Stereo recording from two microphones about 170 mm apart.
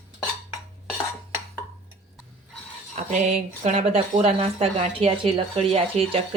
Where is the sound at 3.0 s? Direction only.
45° right (ahead or behind).